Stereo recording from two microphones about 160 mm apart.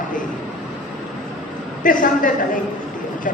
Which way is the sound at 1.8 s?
55° left (ahead or behind).